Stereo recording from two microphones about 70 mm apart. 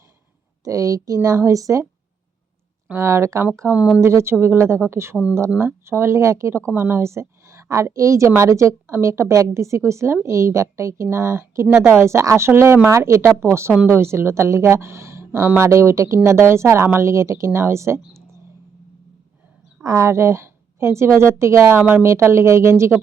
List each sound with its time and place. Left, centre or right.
0.6 s a woman's voice: right
3.0 s a woman's voice: right
15.7 s speech: right
19.8 s speech: right
21.8 s a woman's voice: right
22.0 s speech: right